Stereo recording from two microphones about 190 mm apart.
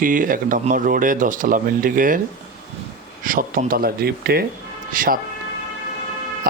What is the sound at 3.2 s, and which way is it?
Speech, 45° right (ahead or behind).